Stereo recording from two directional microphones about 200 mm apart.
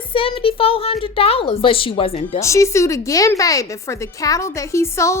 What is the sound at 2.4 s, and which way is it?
A woman's voice, 15° left (ahead or behind).